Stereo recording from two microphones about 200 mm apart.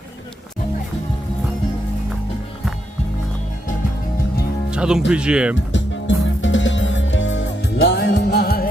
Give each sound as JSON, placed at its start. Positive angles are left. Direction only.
{"t": 4.7, "sound": "speech", "side_deg": -5}
{"t": 5.7, "sound": "music", "side_deg": 65}